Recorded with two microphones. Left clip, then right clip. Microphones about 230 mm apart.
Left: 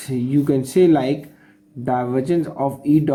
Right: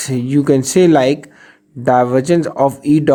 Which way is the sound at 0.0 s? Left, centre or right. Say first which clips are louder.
Right 4 dB; right.